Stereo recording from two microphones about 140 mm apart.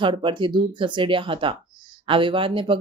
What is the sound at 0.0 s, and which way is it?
Speech, 35° right (ahead or behind).